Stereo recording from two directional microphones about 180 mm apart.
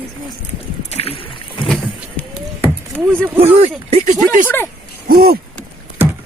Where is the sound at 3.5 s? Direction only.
35° right (ahead or behind).